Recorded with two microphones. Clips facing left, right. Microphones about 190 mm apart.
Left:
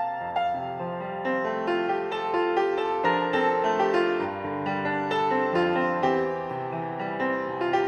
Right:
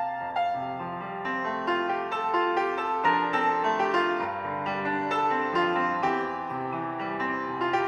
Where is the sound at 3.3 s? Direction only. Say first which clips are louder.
Left 4 dB; 35° left (ahead or behind).